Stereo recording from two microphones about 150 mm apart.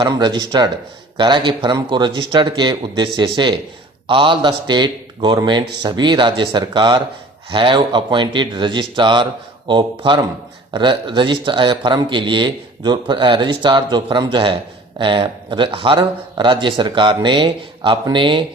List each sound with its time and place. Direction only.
0.0 s speech: 30° right (ahead or behind)